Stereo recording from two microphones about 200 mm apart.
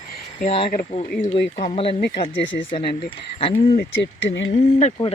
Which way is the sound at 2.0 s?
50° left (ahead or behind).